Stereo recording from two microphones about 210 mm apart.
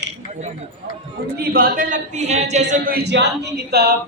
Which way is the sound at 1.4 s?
45° right (ahead or behind).